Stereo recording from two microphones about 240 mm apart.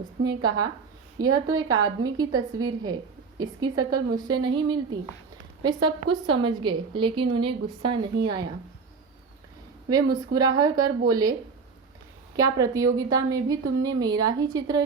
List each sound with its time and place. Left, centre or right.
1.2 s a woman's voice: centre
9.9 s a woman's voice: centre
12.4 s a woman's voice: centre